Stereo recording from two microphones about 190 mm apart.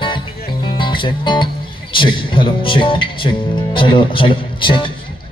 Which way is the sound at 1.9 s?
25° left (ahead or behind).